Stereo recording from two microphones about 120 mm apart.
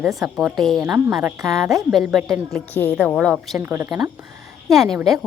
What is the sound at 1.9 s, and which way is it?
Speech, 5° right (ahead or behind).